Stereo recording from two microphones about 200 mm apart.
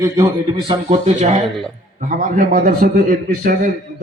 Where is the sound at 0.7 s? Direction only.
35° right (ahead or behind).